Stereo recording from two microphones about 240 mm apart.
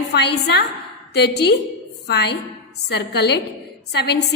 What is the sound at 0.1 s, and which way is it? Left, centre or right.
A woman's voice, left.